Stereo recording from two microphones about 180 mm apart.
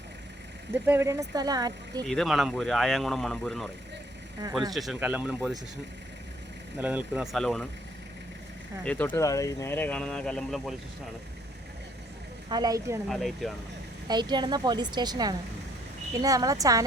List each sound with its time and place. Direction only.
0.7 s speech: 15° right (ahead or behind)
2.0 s speech: centre (ahead or behind)
4.7 s speech: centre (ahead or behind)
6.7 s speech: 10° right (ahead or behind)
7.3 s speech: 5° left (ahead or behind)
8.8 s speech: 10° left (ahead or behind)
12.5 s speech: 20° right (ahead or behind)
13.1 s speech: centre (ahead or behind)
14.1 s speech: 25° right (ahead or behind)